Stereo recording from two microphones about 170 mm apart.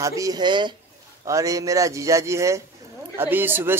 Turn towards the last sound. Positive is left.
turn(degrees=-10)  # may be behind; listen again after turning